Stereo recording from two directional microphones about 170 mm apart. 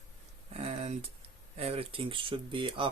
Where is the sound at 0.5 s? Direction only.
40° right (ahead or behind).